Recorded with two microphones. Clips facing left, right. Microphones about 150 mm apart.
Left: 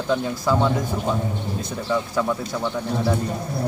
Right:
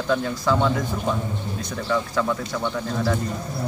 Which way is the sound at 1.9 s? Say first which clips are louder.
Left 1 dB; 15° left (ahead or behind).